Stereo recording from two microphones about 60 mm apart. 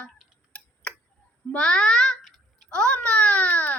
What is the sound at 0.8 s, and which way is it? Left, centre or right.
Tick-tock, centre.